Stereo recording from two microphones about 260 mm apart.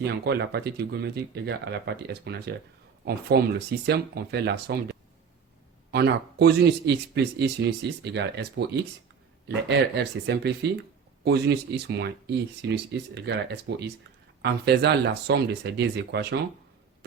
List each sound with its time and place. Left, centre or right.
0.0 s speech: right